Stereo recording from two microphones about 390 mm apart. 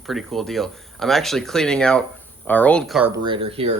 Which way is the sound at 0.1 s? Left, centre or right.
Centre.